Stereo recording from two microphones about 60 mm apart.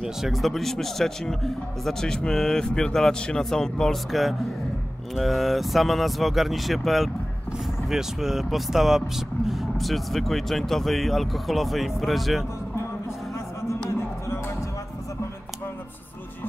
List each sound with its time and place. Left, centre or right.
0.0 s speech: centre
13.8 s music: left